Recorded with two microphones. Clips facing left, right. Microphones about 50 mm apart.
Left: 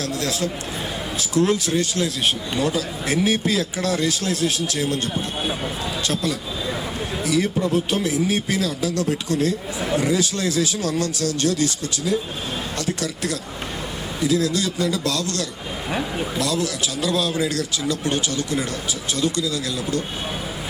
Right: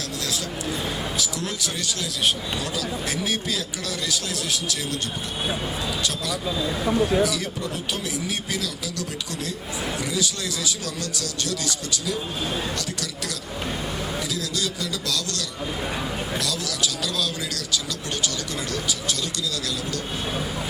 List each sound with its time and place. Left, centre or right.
1.2 s speech: left
7.3 s speech: left